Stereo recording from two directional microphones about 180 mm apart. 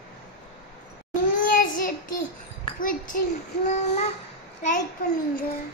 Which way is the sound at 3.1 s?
50° left (ahead or behind).